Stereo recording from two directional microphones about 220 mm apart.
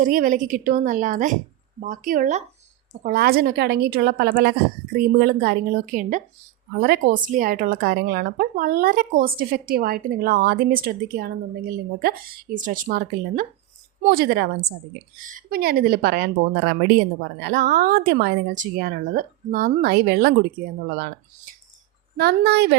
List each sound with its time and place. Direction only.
0.0 s speech: 40° right (ahead or behind)
22.2 s speech: 50° right (ahead or behind)